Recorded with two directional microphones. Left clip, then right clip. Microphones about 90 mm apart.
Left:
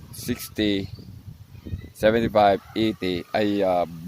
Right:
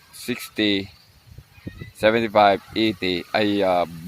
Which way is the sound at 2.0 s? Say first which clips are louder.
Right 2 dB; 30° left (ahead or behind).